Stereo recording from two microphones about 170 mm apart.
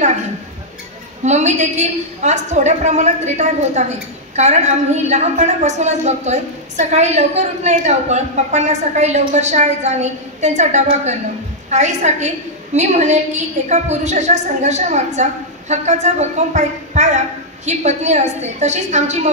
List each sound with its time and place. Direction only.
1.2 s a woman's voice: 40° right (ahead or behind)